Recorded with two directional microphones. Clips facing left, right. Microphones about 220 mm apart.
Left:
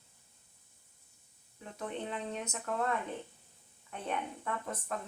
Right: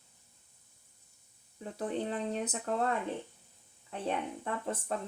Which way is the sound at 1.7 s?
35° right (ahead or behind).